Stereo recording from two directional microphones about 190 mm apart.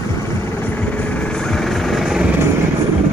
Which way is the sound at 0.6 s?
5° left (ahead or behind).